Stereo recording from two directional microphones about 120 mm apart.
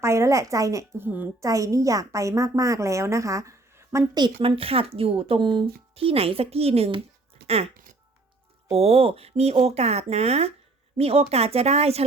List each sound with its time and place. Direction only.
0.0 s a woman's voice: 25° right (ahead or behind)
1.5 s a woman's voice: 30° right (ahead or behind)
4.2 s speech: 50° right (ahead or behind)
8.7 s speech: 55° right (ahead or behind)